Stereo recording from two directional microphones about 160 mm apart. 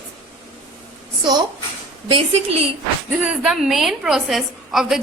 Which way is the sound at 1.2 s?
30° right (ahead or behind).